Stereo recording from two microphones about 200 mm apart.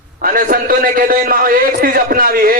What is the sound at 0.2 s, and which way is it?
A man's voice, 45° right (ahead or behind).